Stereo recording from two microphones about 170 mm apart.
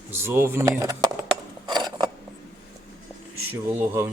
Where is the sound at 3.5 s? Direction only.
10° right (ahead or behind).